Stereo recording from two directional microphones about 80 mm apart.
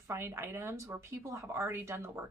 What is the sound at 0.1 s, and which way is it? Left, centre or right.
Speech, right.